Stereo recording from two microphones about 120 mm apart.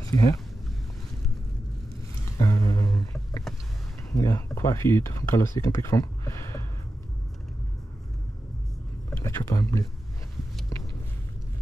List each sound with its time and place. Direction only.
0.0 s speech: 30° left (ahead or behind)
2.3 s a sound: 30° left (ahead or behind)
4.1 s speech: 25° left (ahead or behind)
9.1 s speech: 25° left (ahead or behind)